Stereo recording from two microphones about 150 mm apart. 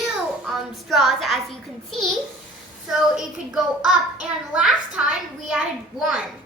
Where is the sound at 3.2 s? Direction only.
5° right (ahead or behind).